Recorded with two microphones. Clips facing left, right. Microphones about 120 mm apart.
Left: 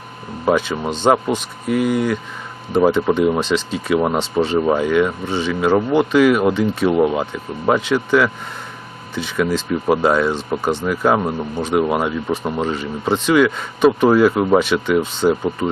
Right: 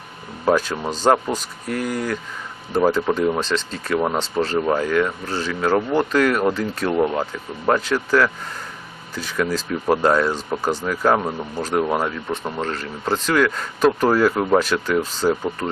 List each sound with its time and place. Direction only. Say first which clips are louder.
0.4 s speech: left 2 dB; centre (ahead or behind)
4.2 s speech: left 4 dB; centre (ahead or behind)
10.8 s speech: left 2 dB; 5° left (ahead or behind)